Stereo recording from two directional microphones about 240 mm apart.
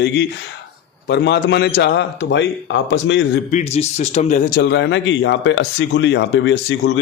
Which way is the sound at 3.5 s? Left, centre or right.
Left.